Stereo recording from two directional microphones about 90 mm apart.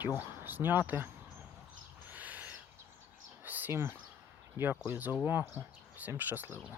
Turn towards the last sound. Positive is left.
turn(degrees=-25)  # may be behind; listen again after turning